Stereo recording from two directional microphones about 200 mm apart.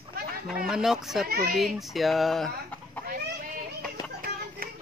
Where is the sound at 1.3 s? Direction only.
50° right (ahead or behind).